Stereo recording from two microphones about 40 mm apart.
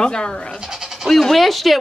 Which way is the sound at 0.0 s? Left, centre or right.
Left.